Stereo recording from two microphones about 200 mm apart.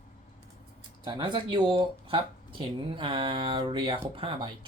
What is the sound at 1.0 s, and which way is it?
Speech, 25° right (ahead or behind).